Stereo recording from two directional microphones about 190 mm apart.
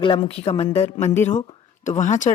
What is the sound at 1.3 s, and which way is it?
Speech, 25° left (ahead or behind).